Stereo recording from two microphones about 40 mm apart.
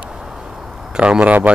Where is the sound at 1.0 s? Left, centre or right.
Right.